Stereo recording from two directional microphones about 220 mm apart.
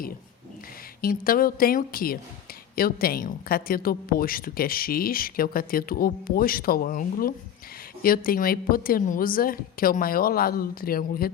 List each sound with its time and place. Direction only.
1.0 s speech: 40° left (ahead or behind)